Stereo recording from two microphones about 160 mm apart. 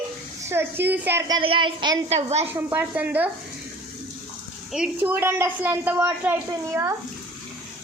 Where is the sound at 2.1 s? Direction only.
40° right (ahead or behind).